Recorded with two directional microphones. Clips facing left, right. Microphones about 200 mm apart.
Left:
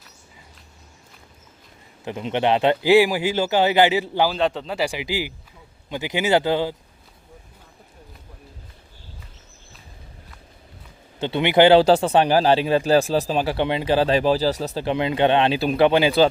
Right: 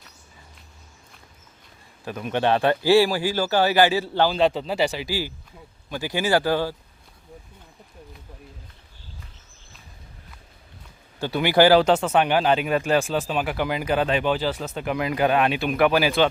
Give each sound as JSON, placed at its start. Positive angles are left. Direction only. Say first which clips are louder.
{"t": 2.0, "sound": "speech", "louder": "left 1 dB", "side_deg": 20}
{"t": 4.3, "sound": "a man's voice", "louder": "right 2 dB", "side_deg": 0}
{"t": 4.9, "sound": "speech", "louder": "left 1 dB", "side_deg": 15}
{"t": 11.2, "sound": "speech", "louder": "left 2 dB", "side_deg": 25}